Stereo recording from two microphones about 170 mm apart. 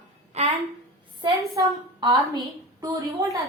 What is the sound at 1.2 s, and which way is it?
A woman's voice, 20° right (ahead or behind).